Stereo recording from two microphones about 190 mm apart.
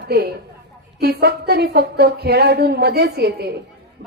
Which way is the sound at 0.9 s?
55° right (ahead or behind).